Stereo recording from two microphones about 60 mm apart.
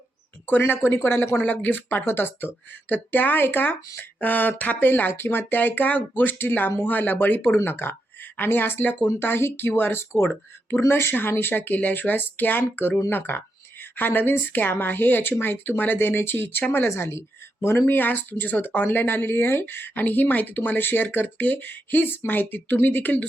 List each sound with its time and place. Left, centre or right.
1.0 s speech: left
1.4 s speech: left
17.0 s speech: left